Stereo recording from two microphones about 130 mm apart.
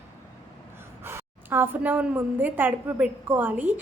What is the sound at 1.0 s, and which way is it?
A woman's voice, 15° right (ahead or behind).